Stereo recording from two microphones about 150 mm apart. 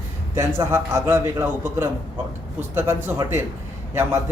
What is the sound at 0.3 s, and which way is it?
Speech, 20° right (ahead or behind).